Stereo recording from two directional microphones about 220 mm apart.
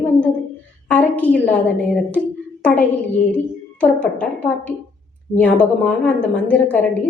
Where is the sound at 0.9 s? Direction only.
5° left (ahead or behind).